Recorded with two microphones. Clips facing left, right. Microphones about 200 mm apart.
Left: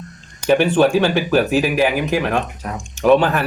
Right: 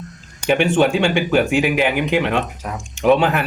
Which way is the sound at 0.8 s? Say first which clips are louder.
Left 1 dB; 20° right (ahead or behind).